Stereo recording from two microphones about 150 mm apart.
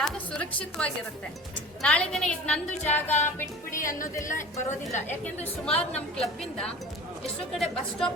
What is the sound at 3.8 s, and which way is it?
A woman's voice, 60° left (ahead or behind).